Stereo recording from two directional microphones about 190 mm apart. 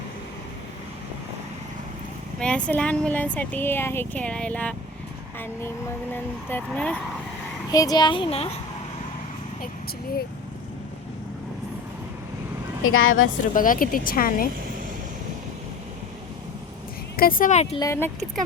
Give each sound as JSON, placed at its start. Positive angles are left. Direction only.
{"t": 2.4, "sound": "speech", "side_deg": 5}
{"t": 6.5, "sound": "speech", "side_deg": 5}
{"t": 7.7, "sound": "a child's voice", "side_deg": 20}
{"t": 12.8, "sound": "speech", "side_deg": 90}
{"t": 13.5, "sound": "speech", "side_deg": 45}
{"t": 17.2, "sound": "speech", "side_deg": 50}
{"t": 17.7, "sound": "speech", "side_deg": 15}